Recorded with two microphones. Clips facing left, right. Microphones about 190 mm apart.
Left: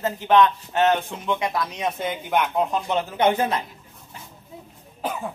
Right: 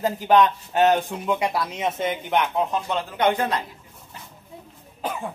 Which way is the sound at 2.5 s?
15° left (ahead or behind).